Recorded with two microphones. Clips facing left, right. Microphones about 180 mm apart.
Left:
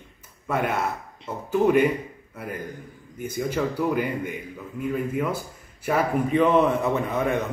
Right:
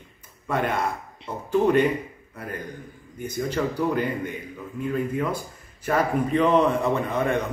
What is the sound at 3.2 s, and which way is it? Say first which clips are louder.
A man's voice: even; 10° left (ahead or behind).